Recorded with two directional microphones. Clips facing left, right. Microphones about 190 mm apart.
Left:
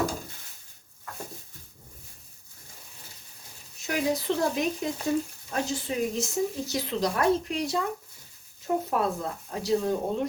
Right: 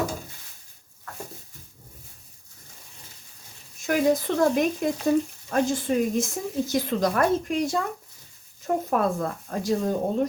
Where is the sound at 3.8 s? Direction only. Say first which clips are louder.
Right 5 dB; 50° right (ahead or behind).